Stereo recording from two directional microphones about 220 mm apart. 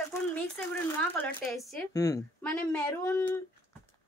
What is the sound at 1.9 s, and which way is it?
Speech, 15° left (ahead or behind).